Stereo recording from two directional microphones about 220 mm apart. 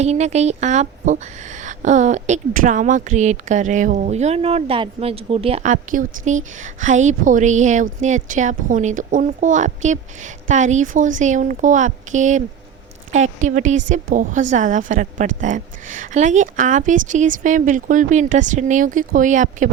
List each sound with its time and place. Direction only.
0.0 s speech: 30° right (ahead or behind)